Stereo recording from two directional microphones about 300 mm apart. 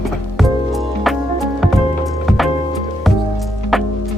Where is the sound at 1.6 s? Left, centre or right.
Centre.